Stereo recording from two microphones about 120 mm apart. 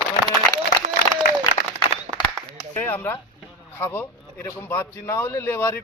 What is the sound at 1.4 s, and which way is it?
Applause, 35° left (ahead or behind).